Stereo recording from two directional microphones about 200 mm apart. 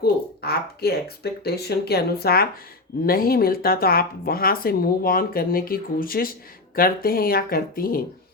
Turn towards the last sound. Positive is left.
turn(degrees=45)  # may be behind; listen again after turning